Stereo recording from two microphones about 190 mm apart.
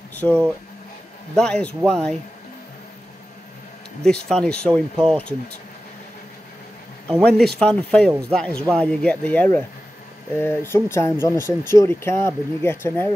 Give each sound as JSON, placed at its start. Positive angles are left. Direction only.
{"t": 0.1, "sound": "a sound", "side_deg": 10}
{"t": 1.3, "sound": "speech", "side_deg": 5}
{"t": 4.0, "sound": "speech", "side_deg": 5}
{"t": 7.1, "sound": "speech", "side_deg": 5}